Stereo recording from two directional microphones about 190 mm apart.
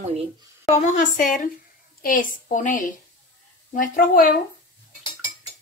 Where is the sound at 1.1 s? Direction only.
45° left (ahead or behind).